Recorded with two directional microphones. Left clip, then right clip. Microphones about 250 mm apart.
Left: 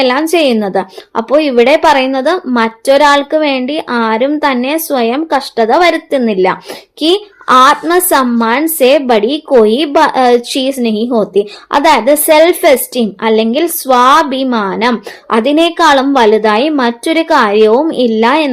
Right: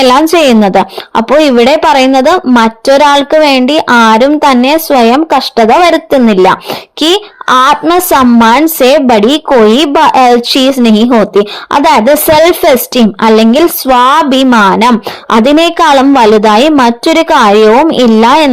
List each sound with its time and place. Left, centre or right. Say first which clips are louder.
0.0 s a woman's voice: right 5 dB; right